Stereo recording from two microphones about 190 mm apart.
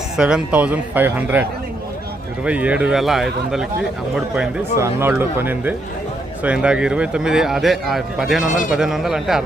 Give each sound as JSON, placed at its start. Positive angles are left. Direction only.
{"t": 0.2, "sound": "speech", "side_deg": -5}
{"t": 8.4, "sound": "a man's voice", "side_deg": 45}
{"t": 8.7, "sound": "speech", "side_deg": -5}